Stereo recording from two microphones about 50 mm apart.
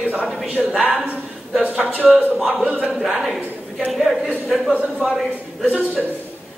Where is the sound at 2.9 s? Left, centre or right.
Centre.